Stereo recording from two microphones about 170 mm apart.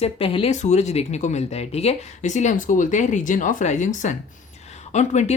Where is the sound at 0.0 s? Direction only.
35° left (ahead or behind).